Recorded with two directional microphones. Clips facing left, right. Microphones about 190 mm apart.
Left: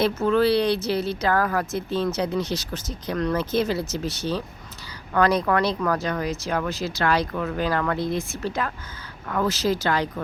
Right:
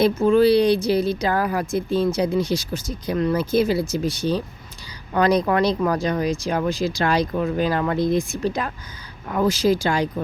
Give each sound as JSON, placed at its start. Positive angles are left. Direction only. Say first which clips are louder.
{"t": 0.0, "sound": "speech", "louder": "right 4 dB", "side_deg": -10}